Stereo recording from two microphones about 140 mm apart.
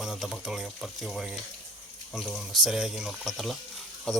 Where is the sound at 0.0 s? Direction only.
Centre (ahead or behind).